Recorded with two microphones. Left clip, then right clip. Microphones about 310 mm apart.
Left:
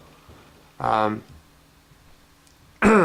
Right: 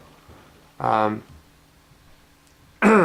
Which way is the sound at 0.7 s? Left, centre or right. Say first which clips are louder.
Right 1 dB; centre.